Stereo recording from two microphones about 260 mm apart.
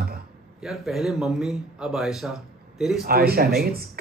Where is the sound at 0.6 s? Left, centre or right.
Centre.